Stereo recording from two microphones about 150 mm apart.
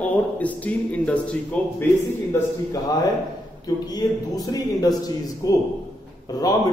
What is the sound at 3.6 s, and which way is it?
A man's voice, 25° left (ahead or behind).